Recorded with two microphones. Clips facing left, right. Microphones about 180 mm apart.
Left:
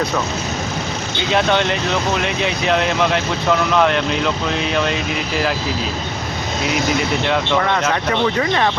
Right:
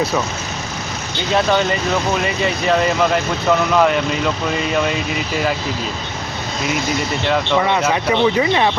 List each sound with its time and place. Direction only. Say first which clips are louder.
1.3 s speech: right 1 dB; centre (ahead or behind)
7.3 s speech: right 4 dB; 5° right (ahead or behind)